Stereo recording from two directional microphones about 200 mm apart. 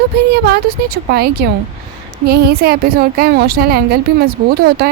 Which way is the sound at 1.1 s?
50° right (ahead or behind).